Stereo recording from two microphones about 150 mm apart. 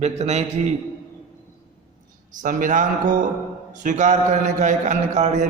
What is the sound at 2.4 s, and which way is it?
A man's voice, 60° right (ahead or behind).